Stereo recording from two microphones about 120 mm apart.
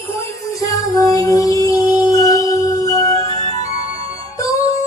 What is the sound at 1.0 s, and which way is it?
Music, 30° left (ahead or behind).